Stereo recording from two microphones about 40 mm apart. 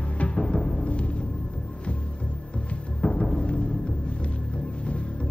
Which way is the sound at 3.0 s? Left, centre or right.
Left.